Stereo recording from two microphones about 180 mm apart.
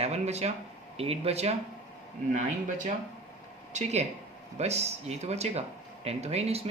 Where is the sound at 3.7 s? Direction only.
35° right (ahead or behind).